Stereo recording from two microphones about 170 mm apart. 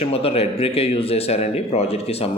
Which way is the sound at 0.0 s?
35° left (ahead or behind).